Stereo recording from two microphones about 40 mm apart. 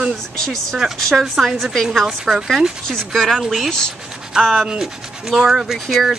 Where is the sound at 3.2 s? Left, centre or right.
Centre.